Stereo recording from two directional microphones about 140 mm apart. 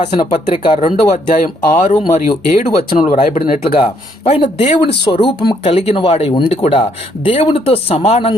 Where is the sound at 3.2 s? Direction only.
80° left.